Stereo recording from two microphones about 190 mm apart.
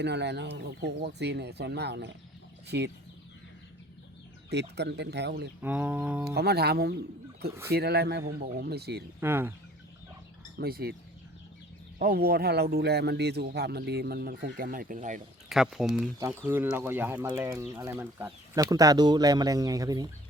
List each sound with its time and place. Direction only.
0.0 s speech: 65° right (ahead or behind)
4.8 s speech: 65° right (ahead or behind)
5.6 s speech: 10° right (ahead or behind)
6.3 s speech: 60° right (ahead or behind)
9.2 s speech: 10° right (ahead or behind)
10.6 s speech: 55° right (ahead or behind)
11.9 s speech: 50° right (ahead or behind)
15.4 s speech: centre (ahead or behind); by 20.1 s 20° right (ahead or behind)